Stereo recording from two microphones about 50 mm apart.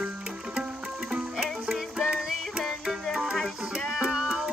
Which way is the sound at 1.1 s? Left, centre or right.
Centre.